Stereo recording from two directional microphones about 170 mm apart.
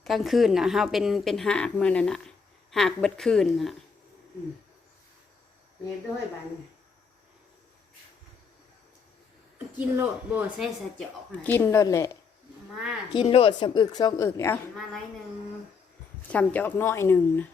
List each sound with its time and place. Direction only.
0.0 s speech: centre (ahead or behind)
9.7 s speech: 10° right (ahead or behind)
11.4 s a woman's voice: 15° left (ahead or behind)
12.7 s speech: 5° right (ahead or behind)
13.1 s a woman's voice: 35° left (ahead or behind); by 14.6 s 15° left (ahead or behind)
16.3 s a woman's voice: 10° left (ahead or behind)